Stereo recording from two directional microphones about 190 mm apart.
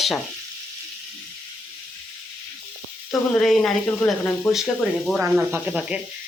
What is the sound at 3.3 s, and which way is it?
Speech, 5° left (ahead or behind).